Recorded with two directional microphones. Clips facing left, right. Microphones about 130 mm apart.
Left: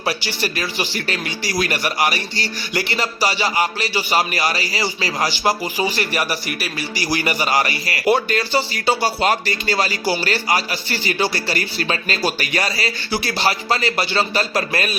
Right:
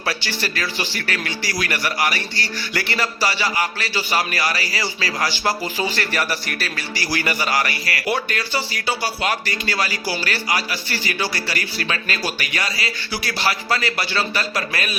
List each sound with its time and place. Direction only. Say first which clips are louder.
0.0 s speech: left 3 dB; 15° left (ahead or behind); by 14.9 s 30° left (ahead or behind)